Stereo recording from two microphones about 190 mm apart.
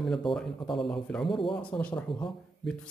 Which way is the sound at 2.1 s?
25° left (ahead or behind).